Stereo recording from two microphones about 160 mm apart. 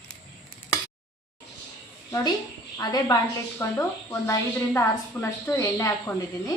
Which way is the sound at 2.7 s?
25° left (ahead or behind).